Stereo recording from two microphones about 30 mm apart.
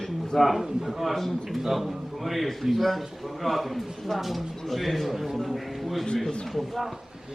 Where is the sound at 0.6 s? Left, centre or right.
Centre.